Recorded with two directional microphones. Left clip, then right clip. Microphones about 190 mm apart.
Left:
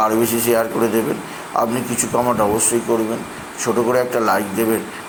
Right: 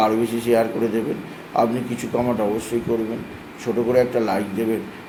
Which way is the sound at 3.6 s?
Centre (ahead or behind).